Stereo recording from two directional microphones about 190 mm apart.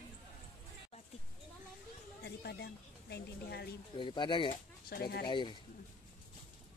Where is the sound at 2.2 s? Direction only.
60° left (ahead or behind).